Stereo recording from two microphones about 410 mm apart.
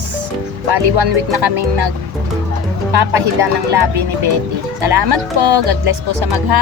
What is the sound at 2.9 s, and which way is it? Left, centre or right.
Speech, right.